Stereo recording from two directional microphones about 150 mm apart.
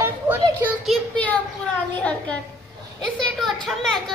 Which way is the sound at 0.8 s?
10° left (ahead or behind).